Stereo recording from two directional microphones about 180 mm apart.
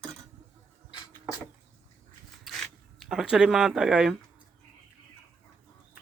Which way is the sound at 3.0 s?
5° right (ahead or behind).